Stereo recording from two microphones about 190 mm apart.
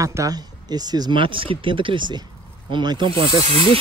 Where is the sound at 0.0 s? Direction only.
15° right (ahead or behind).